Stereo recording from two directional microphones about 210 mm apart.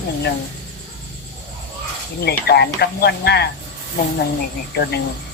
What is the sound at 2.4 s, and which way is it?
Speech, 50° left (ahead or behind).